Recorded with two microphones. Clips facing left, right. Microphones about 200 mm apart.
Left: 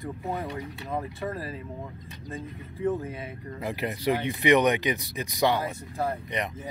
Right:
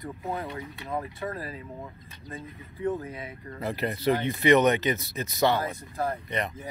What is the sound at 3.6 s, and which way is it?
Speech, 10° left (ahead or behind).